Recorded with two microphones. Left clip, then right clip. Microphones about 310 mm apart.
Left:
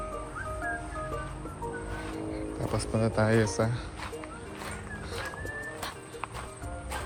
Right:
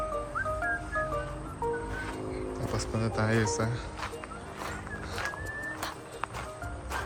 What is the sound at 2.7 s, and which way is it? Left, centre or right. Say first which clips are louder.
Speech: left 4 dB; centre.